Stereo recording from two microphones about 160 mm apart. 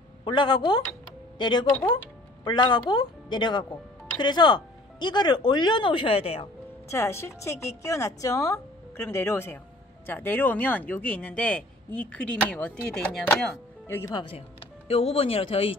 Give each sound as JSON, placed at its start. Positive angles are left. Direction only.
{"t": 0.2, "sound": "speech", "side_deg": 30}
{"t": 6.9, "sound": "speech", "side_deg": 15}
{"t": 14.1, "sound": "speech", "side_deg": 30}